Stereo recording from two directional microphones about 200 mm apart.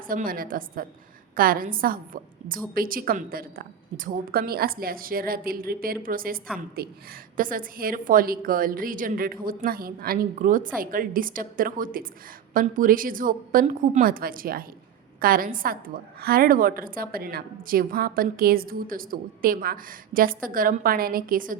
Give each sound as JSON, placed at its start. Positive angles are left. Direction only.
{"t": 0.1, "sound": "a woman's voice", "side_deg": -45}